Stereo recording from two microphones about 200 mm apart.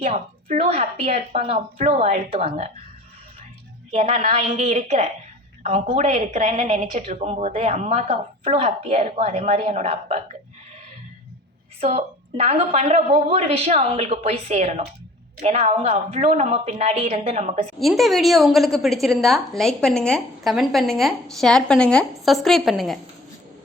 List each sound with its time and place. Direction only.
0.0 s a woman's voice: 35° right (ahead or behind)
3.9 s a woman's voice: 30° right (ahead or behind)
11.8 s a woman's voice: 30° right (ahead or behind)
17.7 s a woman's voice: centre (ahead or behind)